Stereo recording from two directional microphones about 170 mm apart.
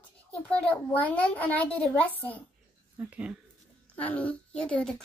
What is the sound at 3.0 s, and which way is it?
Speech, 10° right (ahead or behind).